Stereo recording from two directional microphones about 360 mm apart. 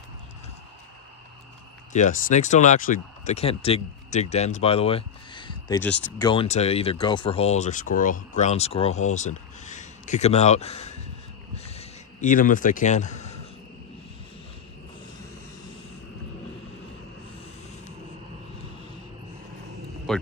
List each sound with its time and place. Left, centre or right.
1.9 s speech: centre
11.5 s a sound: centre
20.1 s vehicle: centre